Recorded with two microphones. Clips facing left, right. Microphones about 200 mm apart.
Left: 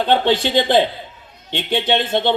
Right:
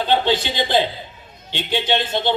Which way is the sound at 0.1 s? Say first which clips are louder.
Left 3 dB; 60° left (ahead or behind).